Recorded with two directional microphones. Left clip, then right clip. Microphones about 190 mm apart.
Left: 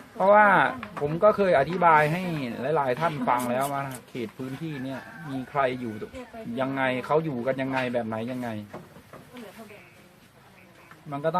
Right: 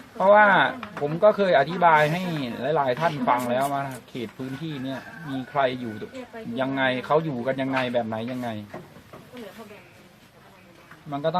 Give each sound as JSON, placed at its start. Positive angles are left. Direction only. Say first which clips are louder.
{"t": 0.2, "sound": "speech", "louder": "right 2 dB", "side_deg": 10}
{"t": 11.1, "sound": "speech", "louder": "right 2 dB", "side_deg": 10}